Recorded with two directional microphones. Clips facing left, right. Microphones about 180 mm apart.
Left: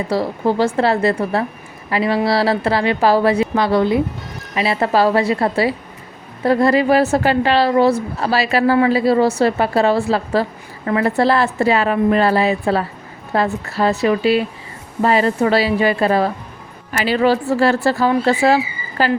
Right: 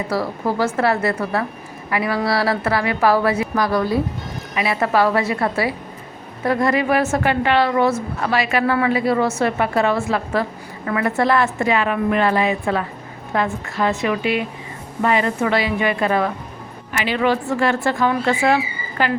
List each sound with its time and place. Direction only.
0.1 s a woman's voice: 25° left (ahead or behind)